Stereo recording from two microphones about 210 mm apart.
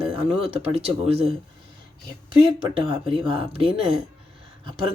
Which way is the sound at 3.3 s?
25° right (ahead or behind).